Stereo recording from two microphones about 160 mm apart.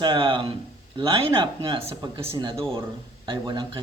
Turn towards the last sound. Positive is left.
turn(degrees=-30)  # may be behind; listen again after turning